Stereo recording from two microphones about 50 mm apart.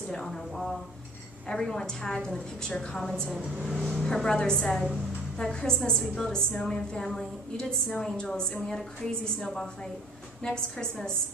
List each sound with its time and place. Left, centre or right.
0.1 s a woman's voice: centre
3.6 s a woman's voice: centre
10.4 s a woman's voice: centre